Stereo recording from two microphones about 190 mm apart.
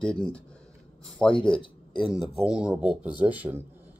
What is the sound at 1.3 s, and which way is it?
Speech, 25° left (ahead or behind).